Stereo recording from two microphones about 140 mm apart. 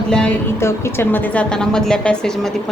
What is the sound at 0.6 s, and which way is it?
A woman's voice, 20° left (ahead or behind).